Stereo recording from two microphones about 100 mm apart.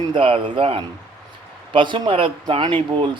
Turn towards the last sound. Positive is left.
turn(degrees=-55)  # may be behind; listen again after turning